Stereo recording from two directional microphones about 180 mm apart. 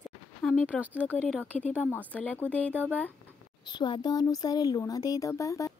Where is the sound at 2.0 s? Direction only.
10° left (ahead or behind).